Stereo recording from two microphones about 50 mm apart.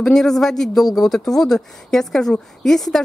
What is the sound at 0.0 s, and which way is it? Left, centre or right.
Speech, centre.